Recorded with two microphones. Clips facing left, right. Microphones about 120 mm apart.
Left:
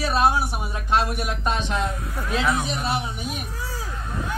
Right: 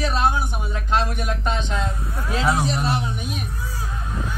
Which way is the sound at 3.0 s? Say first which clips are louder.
Right 1 dB; 5° left (ahead or behind).